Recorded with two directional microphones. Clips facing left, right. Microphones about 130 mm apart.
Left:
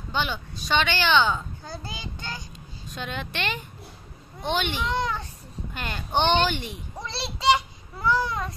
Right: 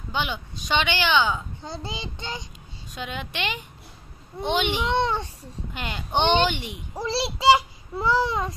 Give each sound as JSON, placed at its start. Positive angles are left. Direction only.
{"t": 0.1, "sound": "speech", "side_deg": -15}
{"t": 1.6, "sound": "child singing", "side_deg": -25}
{"t": 2.9, "sound": "speech", "side_deg": -10}
{"t": 4.8, "sound": "child singing", "side_deg": -30}
{"t": 5.8, "sound": "speech", "side_deg": -15}
{"t": 7.0, "sound": "speech", "side_deg": -30}